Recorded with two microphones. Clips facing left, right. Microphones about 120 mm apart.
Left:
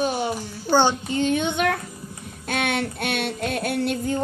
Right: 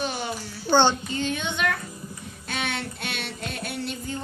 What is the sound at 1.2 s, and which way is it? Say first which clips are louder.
Speech: left 6 dB; 50° left (ahead or behind).